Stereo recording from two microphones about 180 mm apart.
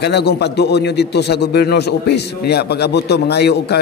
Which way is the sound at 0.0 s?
65° left (ahead or behind).